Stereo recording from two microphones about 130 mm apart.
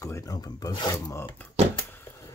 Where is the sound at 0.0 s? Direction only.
25° left (ahead or behind).